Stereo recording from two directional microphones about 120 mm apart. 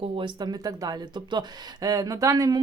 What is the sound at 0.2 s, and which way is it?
Speech, 35° right (ahead or behind).